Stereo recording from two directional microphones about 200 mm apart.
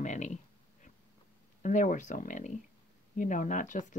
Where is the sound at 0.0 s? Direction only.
35° left (ahead or behind).